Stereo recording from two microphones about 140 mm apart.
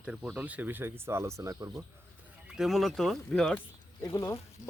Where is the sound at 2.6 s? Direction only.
Centre (ahead or behind).